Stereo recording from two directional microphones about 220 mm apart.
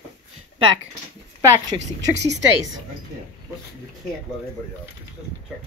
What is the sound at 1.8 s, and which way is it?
Speech, 55° right (ahead or behind).